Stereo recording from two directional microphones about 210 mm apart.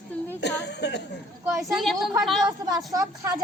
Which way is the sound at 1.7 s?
Centre (ahead or behind).